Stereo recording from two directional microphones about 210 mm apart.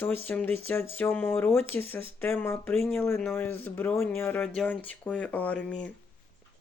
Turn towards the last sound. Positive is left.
turn(degrees=5)  # may be behind; listen again after turning